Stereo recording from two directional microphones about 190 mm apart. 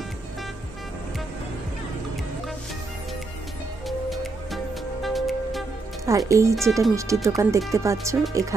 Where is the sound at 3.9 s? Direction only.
Centre (ahead or behind).